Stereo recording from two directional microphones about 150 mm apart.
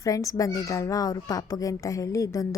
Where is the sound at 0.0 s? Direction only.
20° left (ahead or behind).